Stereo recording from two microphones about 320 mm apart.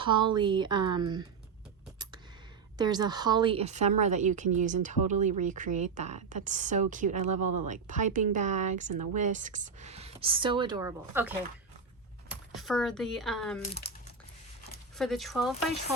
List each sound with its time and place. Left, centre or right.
0.0 s speech: centre
2.7 s a woman's voice: centre
7.3 s speech: right
7.7 s a woman's voice: right; by 11.3 s centre
12.5 s speech: centre
14.9 s speech: centre